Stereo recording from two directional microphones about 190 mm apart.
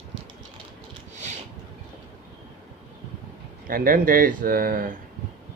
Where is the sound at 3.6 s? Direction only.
50° right (ahead or behind).